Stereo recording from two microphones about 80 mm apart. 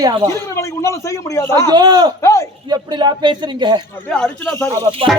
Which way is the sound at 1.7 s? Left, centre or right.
Right.